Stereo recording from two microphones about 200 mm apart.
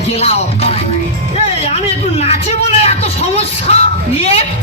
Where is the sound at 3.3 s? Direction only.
30° left (ahead or behind).